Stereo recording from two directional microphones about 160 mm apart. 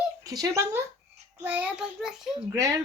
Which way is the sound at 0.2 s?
20° right (ahead or behind).